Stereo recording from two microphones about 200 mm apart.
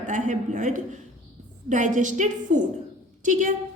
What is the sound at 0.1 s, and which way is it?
A woman's voice, 40° right (ahead or behind).